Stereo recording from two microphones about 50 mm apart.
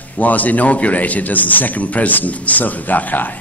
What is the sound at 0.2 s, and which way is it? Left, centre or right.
A man's voice, left.